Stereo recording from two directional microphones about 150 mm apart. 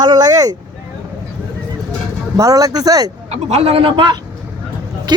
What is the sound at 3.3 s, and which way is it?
Speech, 45° right (ahead or behind).